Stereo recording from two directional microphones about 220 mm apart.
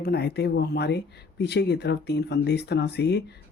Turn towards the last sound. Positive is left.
turn(degrees=50)  # may be behind; listen again after turning